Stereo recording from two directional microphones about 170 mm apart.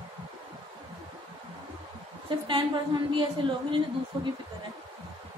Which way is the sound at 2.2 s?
30° right (ahead or behind).